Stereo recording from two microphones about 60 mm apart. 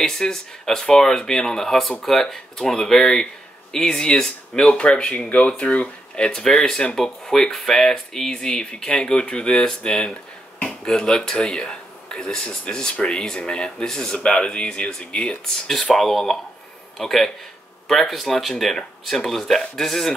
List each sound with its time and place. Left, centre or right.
0.0 s speech: centre